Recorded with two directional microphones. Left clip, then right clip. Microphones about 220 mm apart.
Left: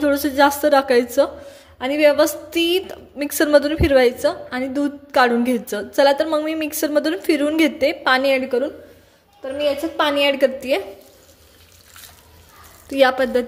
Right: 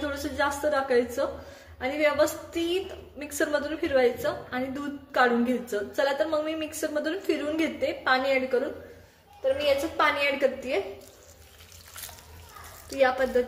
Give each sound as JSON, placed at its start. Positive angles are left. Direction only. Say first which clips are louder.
{"t": 0.0, "sound": "a woman's voice", "louder": "left 12 dB", "side_deg": 40}
{"t": 9.9, "sound": "a woman's voice", "louder": "left 7 dB", "side_deg": 45}
{"t": 12.9, "sound": "a woman's voice", "louder": "left 7 dB", "side_deg": 50}